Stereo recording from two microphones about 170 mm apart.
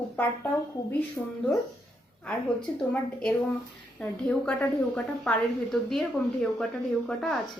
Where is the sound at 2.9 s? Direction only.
5° left (ahead or behind).